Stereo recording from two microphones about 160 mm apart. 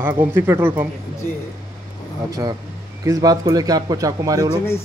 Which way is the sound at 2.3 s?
25° right (ahead or behind).